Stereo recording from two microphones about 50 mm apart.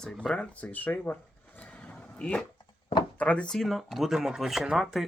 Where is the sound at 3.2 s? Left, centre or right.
Left.